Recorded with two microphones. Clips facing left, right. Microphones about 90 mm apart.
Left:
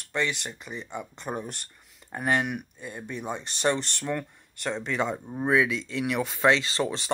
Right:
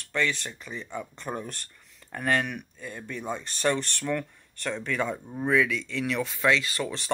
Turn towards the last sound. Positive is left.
turn(degrees=20)  # may be behind; listen again after turning